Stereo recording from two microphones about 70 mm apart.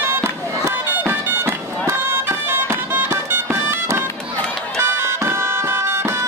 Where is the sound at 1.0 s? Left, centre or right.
Right.